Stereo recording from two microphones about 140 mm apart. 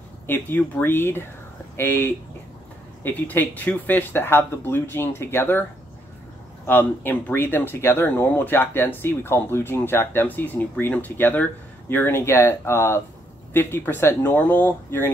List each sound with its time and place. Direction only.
0.3 s speech: 10° left (ahead or behind)